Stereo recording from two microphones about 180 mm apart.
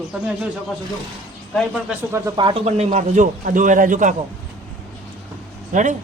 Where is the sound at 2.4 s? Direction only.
30° right (ahead or behind); by 4.1 s 45° right (ahead or behind).